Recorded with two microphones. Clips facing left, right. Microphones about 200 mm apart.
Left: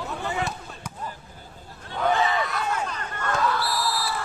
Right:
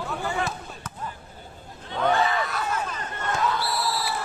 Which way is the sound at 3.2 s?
20° right (ahead or behind).